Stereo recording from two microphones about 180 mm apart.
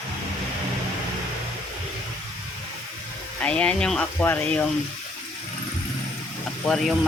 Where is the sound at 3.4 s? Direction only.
5° left (ahead or behind).